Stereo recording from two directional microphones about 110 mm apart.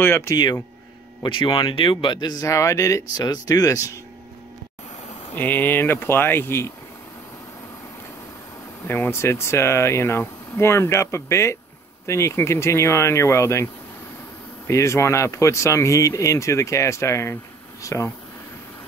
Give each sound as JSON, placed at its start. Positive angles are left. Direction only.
{"t": 0.0, "sound": "speech", "side_deg": 25}
{"t": 1.2, "sound": "speech", "side_deg": 50}
{"t": 2.4, "sound": "speech", "side_deg": 30}
{"t": 5.3, "sound": "speech", "side_deg": 15}
{"t": 8.8, "sound": "speech", "side_deg": 20}
{"t": 14.7, "sound": "speech", "side_deg": 30}